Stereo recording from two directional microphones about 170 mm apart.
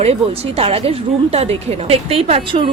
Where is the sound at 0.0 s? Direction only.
35° right (ahead or behind).